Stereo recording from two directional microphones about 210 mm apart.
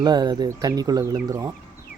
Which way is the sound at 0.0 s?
20° right (ahead or behind).